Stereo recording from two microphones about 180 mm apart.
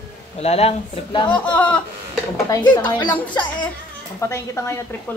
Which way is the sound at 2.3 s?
20° left (ahead or behind).